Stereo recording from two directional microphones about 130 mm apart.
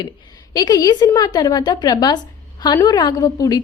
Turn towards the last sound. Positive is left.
turn(degrees=25)  # may be behind; listen again after turning